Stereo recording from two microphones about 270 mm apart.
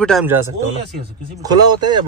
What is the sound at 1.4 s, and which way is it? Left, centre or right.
Speech, centre.